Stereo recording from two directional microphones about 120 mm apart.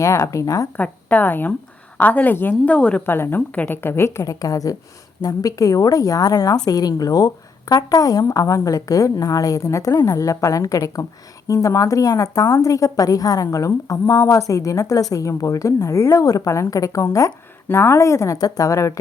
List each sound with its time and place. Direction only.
0.0 s a woman's voice: 25° left (ahead or behind)
0.8 s a woman's voice: 15° left (ahead or behind)